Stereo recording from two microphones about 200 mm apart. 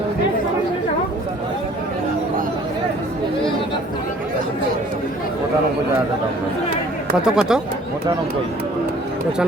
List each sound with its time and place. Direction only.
7.2 s speech: 5° right (ahead or behind)